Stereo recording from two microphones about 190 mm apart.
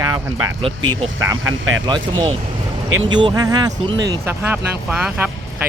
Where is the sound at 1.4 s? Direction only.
90° right.